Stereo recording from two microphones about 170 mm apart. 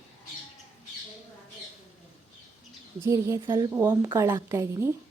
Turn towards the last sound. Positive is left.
turn(degrees=-15)  # may be behind; listen again after turning